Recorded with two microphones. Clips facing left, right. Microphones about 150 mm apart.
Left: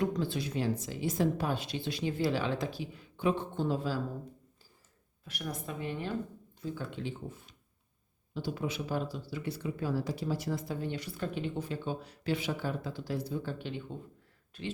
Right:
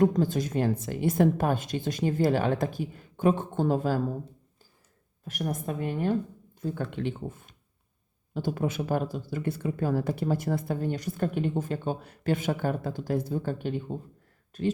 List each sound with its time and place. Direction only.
0.0 s speech: 45° right (ahead or behind)
5.2 s speech: 45° right (ahead or behind)